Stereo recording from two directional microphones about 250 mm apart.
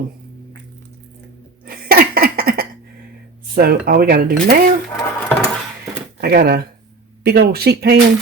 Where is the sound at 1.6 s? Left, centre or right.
Right.